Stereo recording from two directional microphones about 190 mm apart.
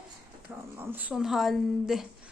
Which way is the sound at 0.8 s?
10° right (ahead or behind).